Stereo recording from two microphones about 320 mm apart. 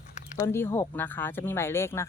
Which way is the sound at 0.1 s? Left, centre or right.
Left.